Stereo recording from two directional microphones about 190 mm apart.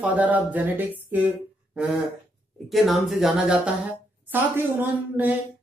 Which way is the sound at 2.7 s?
Centre (ahead or behind).